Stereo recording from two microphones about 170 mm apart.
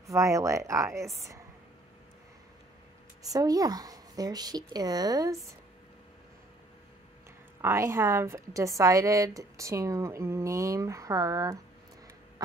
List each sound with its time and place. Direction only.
0.0 s speech: 20° right (ahead or behind)
3.2 s a woman's voice: 20° right (ahead or behind)
7.6 s a woman's voice: 15° right (ahead or behind)
12.4 s duck: 20° right (ahead or behind)